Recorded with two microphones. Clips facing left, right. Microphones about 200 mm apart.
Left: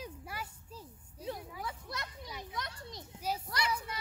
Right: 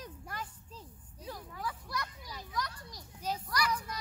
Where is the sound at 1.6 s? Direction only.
25° left (ahead or behind).